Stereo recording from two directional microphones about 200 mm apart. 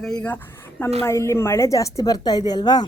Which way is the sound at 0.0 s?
5° left (ahead or behind).